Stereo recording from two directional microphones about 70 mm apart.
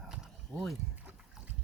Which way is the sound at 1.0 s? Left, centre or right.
Right.